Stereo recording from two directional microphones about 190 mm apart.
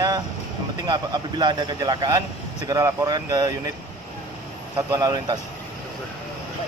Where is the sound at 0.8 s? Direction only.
25° right (ahead or behind).